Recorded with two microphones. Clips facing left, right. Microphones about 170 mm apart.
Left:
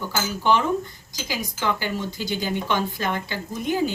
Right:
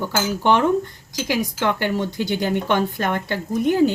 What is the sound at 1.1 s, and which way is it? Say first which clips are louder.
Speech: right 8 dB; 70° right (ahead or behind).